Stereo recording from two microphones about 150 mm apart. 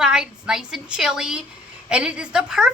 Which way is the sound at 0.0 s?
5° right (ahead or behind).